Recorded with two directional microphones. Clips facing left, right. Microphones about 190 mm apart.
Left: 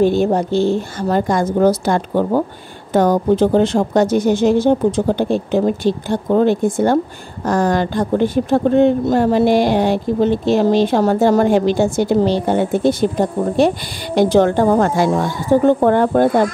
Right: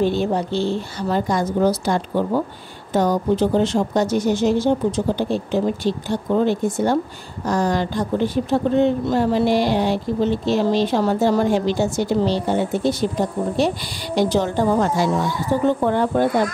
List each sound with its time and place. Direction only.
0.0 s speech: 45° left (ahead or behind)